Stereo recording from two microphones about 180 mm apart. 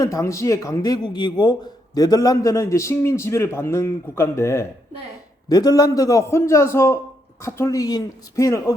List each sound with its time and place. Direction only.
0.0 s speech: 15° left (ahead or behind)